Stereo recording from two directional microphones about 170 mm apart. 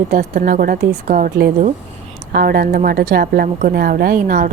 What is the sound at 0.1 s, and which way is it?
A woman's voice, 60° right (ahead or behind).